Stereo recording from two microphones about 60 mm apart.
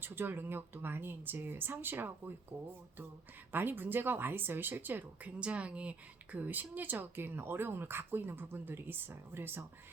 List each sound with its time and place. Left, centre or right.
0.0 s speech: right
5.4 s a woman's voice: centre; by 9.6 s right